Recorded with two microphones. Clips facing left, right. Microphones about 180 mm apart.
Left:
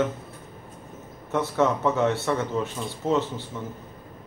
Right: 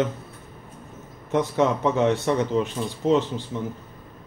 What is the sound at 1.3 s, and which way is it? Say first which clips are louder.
Speech: right 2 dB; 15° right (ahead or behind).